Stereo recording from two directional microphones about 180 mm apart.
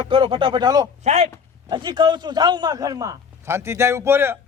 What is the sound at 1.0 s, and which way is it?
Speech, 40° right (ahead or behind).